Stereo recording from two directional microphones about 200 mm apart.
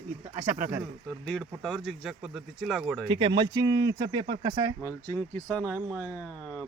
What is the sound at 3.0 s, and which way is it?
Speech, 25° right (ahead or behind).